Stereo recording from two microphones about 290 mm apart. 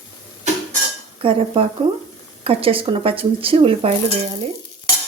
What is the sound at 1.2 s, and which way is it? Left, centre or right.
Dishes, centre.